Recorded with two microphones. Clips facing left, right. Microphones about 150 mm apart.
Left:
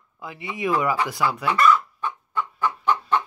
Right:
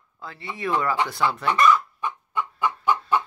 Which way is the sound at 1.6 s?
15° right (ahead or behind).